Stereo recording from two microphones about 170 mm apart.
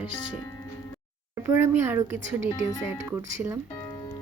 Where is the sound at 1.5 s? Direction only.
15° right (ahead or behind).